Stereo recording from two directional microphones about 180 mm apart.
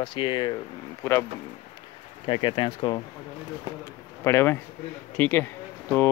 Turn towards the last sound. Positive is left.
turn(degrees=10)  # may be behind; listen again after turning